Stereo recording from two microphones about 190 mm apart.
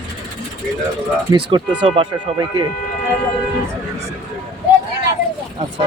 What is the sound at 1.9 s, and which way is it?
Speech, 25° right (ahead or behind).